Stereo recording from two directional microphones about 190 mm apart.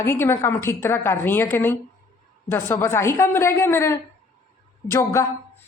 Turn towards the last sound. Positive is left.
turn(degrees=15)  # may be behind; listen again after turning